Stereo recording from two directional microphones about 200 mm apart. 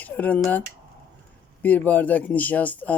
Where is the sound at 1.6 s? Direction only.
10° left (ahead or behind).